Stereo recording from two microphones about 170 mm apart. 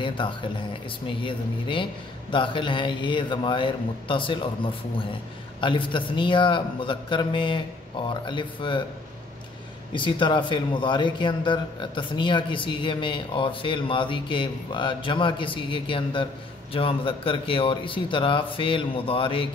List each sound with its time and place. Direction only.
0.0 s a man's voice: 30° left (ahead or behind)
5.6 s a man's voice: 30° left (ahead or behind)
9.9 s a man's voice: 30° left (ahead or behind)